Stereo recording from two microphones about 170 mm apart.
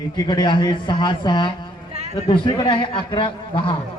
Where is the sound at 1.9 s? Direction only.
40° right (ahead or behind).